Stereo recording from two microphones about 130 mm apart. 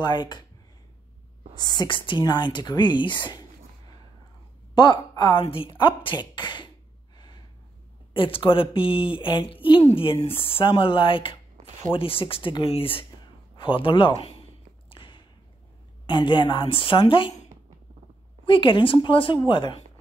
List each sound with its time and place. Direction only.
0.0 s a woman's voice: 35° left (ahead or behind)
1.6 s a woman's voice: 35° left (ahead or behind)
4.7 s a woman's voice: 35° left (ahead or behind)
8.1 s a woman's voice: 40° left (ahead or behind)
14.9 s a sound: 40° left (ahead or behind)
16.1 s a woman's voice: 40° left (ahead or behind)
18.4 s a woman's voice: 40° left (ahead or behind)